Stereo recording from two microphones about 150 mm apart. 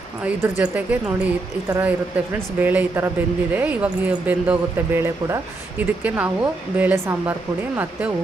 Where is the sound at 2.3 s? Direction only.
10° right (ahead or behind).